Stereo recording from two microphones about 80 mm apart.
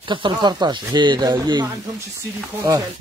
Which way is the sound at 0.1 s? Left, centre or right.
Right.